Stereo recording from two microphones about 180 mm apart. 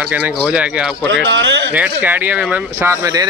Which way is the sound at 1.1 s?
90° right.